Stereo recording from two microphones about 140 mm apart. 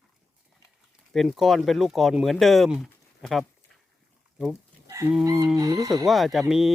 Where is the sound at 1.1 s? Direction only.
Centre (ahead or behind).